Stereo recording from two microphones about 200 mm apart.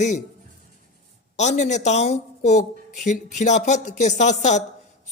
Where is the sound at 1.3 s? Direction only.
35° left (ahead or behind).